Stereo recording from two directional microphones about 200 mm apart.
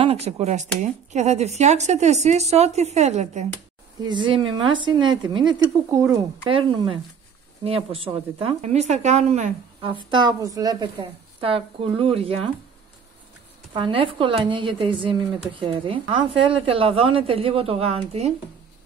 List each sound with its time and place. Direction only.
0.0 s a woman's voice: 30° right (ahead or behind)
4.1 s a woman's voice: 25° right (ahead or behind)
6.4 s a woman's voice: 25° right (ahead or behind)
10.1 s a woman's voice: 20° right (ahead or behind)
13.7 s a woman's voice: 25° right (ahead or behind)